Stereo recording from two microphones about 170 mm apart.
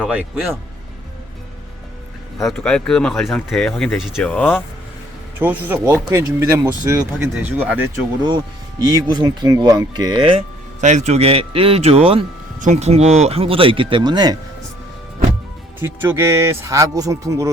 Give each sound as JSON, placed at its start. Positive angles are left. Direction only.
{"t": 0.0, "sound": "speech", "side_deg": -5}
{"t": 2.4, "sound": "speech", "side_deg": 5}
{"t": 4.3, "sound": "speech", "side_deg": 10}
{"t": 5.4, "sound": "speech", "side_deg": -10}
{"t": 8.9, "sound": "speech", "side_deg": -25}
{"t": 10.8, "sound": "speech", "side_deg": -45}
{"t": 12.5, "sound": "speech", "side_deg": -45}
{"t": 15.8, "sound": "speech", "side_deg": -15}